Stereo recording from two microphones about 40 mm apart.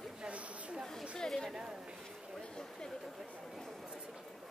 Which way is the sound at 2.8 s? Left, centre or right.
Centre.